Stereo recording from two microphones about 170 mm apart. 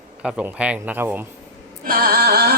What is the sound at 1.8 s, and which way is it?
Music, 60° right (ahead or behind).